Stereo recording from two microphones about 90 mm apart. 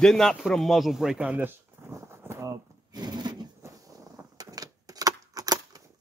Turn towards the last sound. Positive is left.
turn(degrees=-45)  # may be behind; listen again after turning